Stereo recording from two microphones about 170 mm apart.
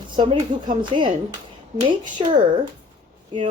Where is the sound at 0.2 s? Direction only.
30° right (ahead or behind).